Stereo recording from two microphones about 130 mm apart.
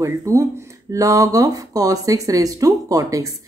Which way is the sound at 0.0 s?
25° right (ahead or behind).